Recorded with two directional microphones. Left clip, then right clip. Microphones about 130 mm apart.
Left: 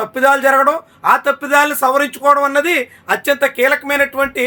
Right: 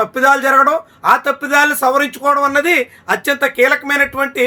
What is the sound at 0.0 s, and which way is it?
Speech, 35° right (ahead or behind).